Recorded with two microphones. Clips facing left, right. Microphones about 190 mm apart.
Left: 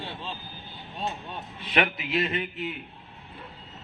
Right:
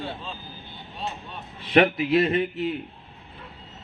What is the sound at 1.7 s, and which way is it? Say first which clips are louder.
Speech: right 8 dB; 45° right (ahead or behind).